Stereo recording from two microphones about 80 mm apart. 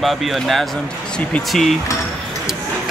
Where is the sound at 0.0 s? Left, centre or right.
Centre.